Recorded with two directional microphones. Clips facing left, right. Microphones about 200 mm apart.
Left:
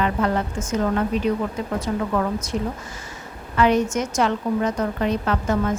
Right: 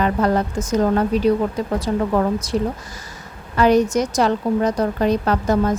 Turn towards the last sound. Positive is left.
turn(degrees=-40)  # may be behind; listen again after turning